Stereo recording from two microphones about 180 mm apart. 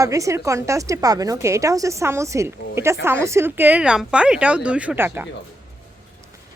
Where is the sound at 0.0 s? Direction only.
15° right (ahead or behind).